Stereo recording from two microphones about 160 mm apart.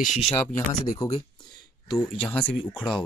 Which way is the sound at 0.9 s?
20° left (ahead or behind).